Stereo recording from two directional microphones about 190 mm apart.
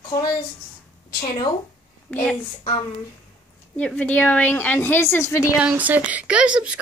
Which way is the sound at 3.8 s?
5° left (ahead or behind).